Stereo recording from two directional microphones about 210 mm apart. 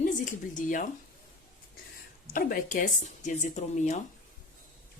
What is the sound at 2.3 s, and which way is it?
Speech, 40° left (ahead or behind).